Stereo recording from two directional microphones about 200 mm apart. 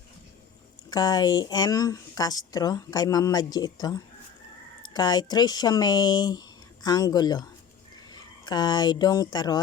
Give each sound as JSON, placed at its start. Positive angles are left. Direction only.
{"t": 0.9, "sound": "speech", "side_deg": 20}